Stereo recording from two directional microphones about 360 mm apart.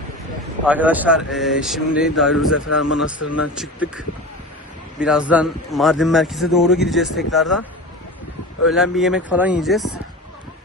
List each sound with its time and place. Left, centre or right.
0.6 s speech: centre
2.5 s a man's voice: left
3.6 s speech: centre
8.6 s speech: centre